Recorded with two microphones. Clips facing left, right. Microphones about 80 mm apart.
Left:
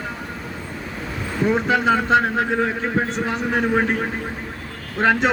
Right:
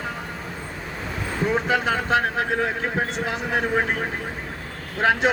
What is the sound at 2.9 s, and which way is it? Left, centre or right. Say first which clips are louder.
Speech: left 3 dB; centre.